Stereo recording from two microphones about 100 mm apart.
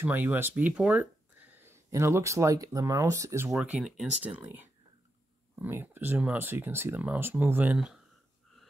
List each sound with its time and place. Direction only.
0.0 s speech: 20° right (ahead or behind)
3.4 s speech: 10° right (ahead or behind)
4.1 s speech: 15° right (ahead or behind)